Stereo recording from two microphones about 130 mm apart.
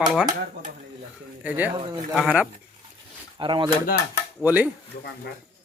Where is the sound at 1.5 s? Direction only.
10° right (ahead or behind).